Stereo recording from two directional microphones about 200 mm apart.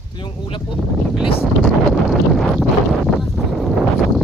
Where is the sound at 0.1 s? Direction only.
25° left (ahead or behind).